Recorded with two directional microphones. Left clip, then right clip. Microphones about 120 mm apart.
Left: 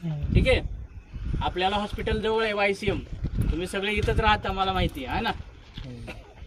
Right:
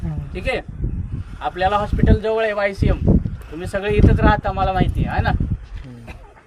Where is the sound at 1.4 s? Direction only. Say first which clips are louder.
Right 7 dB; 25° right (ahead or behind).